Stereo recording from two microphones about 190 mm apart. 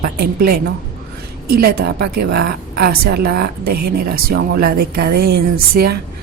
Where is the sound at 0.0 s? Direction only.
50° right (ahead or behind).